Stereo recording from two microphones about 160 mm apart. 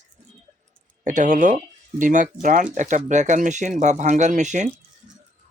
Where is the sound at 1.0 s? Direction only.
50° right (ahead or behind).